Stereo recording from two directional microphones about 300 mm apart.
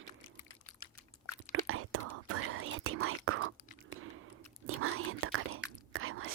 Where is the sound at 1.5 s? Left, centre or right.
Right.